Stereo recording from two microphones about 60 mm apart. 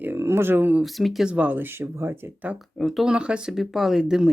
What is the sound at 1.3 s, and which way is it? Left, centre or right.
Speech, right.